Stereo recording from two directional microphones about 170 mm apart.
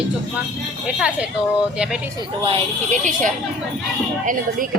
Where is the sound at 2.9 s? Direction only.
50° right (ahead or behind).